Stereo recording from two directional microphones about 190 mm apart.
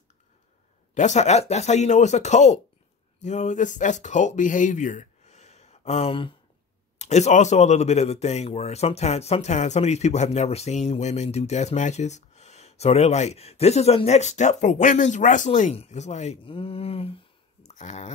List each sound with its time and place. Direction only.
0.9 s speech: 40° left (ahead or behind)